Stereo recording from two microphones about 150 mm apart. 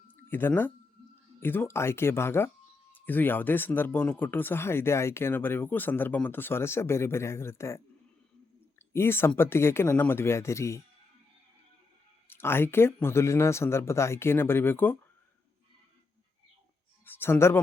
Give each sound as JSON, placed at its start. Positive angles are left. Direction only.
{"t": 0.3, "sound": "speech", "side_deg": 15}
{"t": 8.9, "sound": "speech", "side_deg": 15}
{"t": 12.3, "sound": "speech", "side_deg": 15}
{"t": 17.1, "sound": "speech", "side_deg": 15}